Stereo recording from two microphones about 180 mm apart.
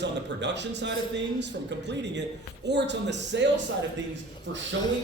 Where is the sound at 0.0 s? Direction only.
75° right (ahead or behind).